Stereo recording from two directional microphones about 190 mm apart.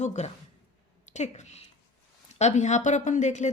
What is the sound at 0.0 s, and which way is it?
A woman's voice, 40° left (ahead or behind).